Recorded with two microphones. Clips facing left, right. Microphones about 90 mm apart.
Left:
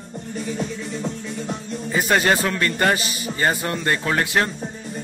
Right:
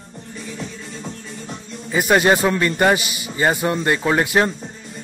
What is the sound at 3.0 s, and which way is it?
Speech, 35° left (ahead or behind).